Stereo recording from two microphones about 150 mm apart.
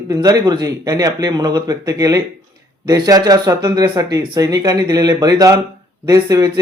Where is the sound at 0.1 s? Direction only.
25° right (ahead or behind).